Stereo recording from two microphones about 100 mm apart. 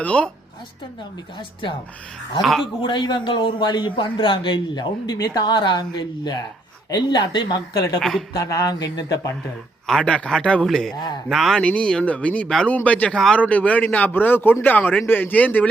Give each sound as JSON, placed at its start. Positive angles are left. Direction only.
{"t": 0.0, "sound": "speech", "side_deg": 15}
{"t": 2.4, "sound": "speech", "side_deg": 0}
{"t": 2.8, "sound": "a man's voice", "side_deg": 50}
{"t": 8.3, "sound": "speech", "side_deg": 35}
{"t": 9.8, "sound": "speech", "side_deg": 10}
{"t": 11.6, "sound": "speech", "side_deg": 10}
{"t": 13.1, "sound": "speech", "side_deg": 5}
{"t": 13.4, "sound": "speech", "side_deg": 15}